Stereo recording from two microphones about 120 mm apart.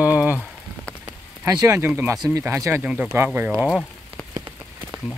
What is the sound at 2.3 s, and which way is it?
Speech, 20° right (ahead or behind).